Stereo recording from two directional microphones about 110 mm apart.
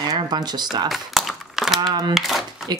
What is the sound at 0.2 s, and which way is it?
Speech, 40° right (ahead or behind).